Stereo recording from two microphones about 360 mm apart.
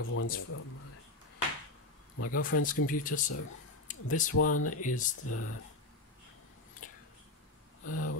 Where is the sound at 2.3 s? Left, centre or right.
Left.